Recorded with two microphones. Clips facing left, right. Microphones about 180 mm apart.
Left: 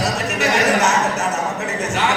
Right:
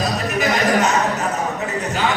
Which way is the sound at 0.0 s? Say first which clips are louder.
Even; 75° left (ahead or behind).